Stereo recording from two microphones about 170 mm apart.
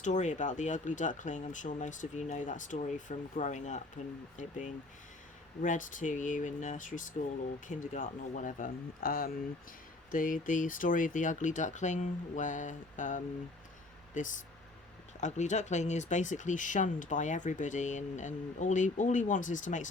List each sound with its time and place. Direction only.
0.0 s speech: 45° left (ahead or behind)